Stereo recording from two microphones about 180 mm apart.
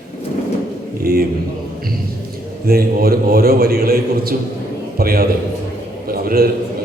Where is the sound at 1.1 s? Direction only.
60° right (ahead or behind).